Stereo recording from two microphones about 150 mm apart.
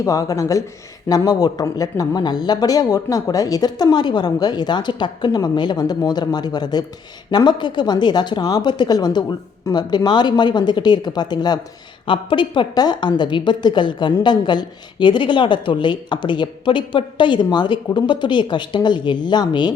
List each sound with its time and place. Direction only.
0.0 s speech: 25° left (ahead or behind)